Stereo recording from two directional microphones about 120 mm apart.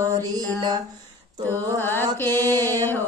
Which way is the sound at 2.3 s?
20° left (ahead or behind).